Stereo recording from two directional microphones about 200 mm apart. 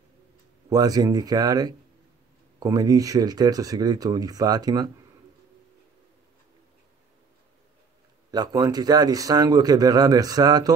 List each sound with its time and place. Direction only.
0.7 s a man's voice: 20° right (ahead or behind)
8.3 s a man's voice: 20° right (ahead or behind)